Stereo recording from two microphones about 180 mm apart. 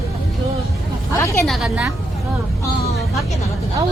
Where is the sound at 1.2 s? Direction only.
15° left (ahead or behind).